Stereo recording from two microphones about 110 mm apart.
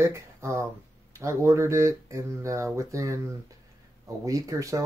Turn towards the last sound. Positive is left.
turn(degrees=-30)  # may be behind; listen again after turning